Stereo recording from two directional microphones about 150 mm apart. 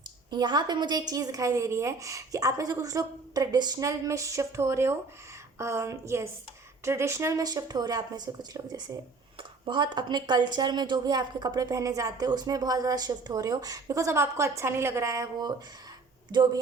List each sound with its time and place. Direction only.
0.3 s a woman's voice: 30° right (ahead or behind)